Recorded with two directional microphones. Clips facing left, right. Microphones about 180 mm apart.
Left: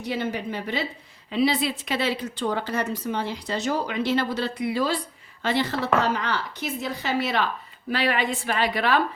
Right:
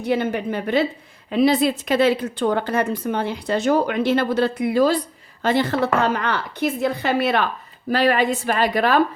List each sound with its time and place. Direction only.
0.0 s a woman's voice: 55° right (ahead or behind)